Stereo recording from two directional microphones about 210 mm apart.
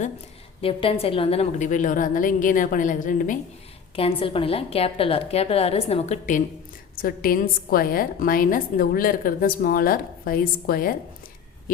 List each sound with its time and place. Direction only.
0.6 s a woman's voice: 25° left (ahead or behind)
3.9 s a woman's voice: 25° left (ahead or behind); by 10.9 s 45° left (ahead or behind)